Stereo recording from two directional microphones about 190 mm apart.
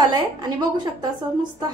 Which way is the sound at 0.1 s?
20° right (ahead or behind).